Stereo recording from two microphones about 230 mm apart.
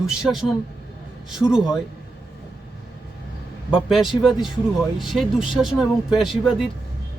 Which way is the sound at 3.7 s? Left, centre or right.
Centre.